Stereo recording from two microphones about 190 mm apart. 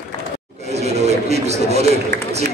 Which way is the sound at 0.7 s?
35° right (ahead or behind).